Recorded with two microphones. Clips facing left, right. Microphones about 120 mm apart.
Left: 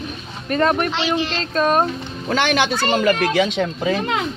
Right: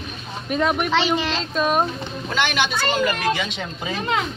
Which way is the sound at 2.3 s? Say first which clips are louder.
Left 4 dB; 40° left (ahead or behind).